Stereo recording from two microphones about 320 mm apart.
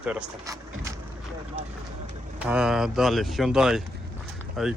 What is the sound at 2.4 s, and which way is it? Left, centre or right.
Speech, centre.